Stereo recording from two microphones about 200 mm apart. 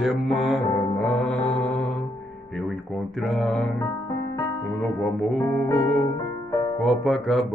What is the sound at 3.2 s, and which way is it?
Speech, centre (ahead or behind).